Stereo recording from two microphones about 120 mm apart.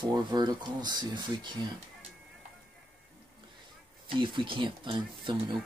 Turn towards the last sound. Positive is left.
turn(degrees=-40)  # may be behind; listen again after turning